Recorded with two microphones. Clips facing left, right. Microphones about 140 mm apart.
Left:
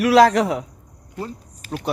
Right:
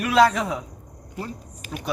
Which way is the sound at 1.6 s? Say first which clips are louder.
Left 5 dB; 15° right (ahead or behind).